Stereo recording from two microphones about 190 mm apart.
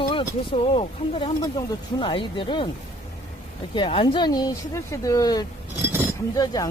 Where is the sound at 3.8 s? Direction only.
25° left (ahead or behind).